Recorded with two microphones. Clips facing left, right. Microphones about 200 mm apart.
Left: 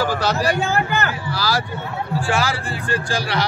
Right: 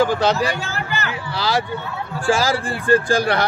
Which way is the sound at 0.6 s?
55° left (ahead or behind).